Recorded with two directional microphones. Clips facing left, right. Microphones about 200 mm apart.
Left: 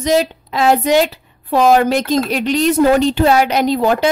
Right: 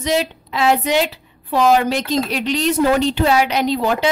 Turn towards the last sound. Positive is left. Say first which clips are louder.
# left 4 dB
turn(degrees=45)  # may be behind; listen again after turning